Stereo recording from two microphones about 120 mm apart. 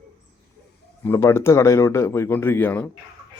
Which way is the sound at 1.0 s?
20° left (ahead or behind).